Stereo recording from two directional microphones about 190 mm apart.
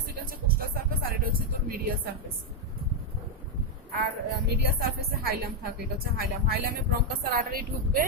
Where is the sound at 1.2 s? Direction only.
50° right (ahead or behind).